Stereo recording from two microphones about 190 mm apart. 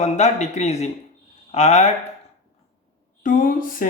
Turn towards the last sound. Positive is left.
turn(degrees=45)  # may be behind; listen again after turning